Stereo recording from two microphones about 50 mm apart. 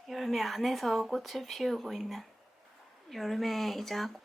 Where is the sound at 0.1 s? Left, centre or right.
Centre.